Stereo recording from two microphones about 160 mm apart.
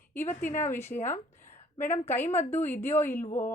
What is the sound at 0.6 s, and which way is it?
Speech, 15° left (ahead or behind).